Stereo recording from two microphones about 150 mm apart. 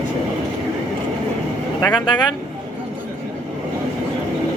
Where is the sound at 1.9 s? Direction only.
30° left (ahead or behind).